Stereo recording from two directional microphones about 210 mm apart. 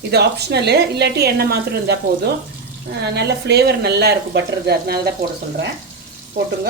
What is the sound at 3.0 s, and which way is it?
Speech, 50° right (ahead or behind).